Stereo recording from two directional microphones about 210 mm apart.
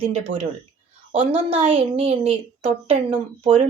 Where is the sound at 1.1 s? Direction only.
25° right (ahead or behind).